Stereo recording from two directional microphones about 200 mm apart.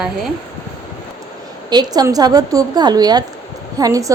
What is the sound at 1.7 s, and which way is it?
A woman's voice, 20° right (ahead or behind).